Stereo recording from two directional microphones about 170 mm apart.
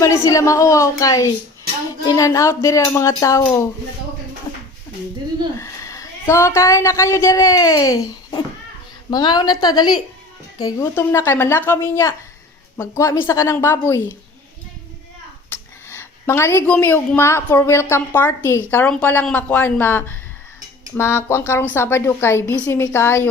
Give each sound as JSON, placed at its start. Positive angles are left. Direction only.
{"t": 0.0, "sound": "speech", "side_deg": 15}
{"t": 5.5, "sound": "a woman's voice", "side_deg": 15}
{"t": 15.9, "sound": "a woman's voice", "side_deg": 15}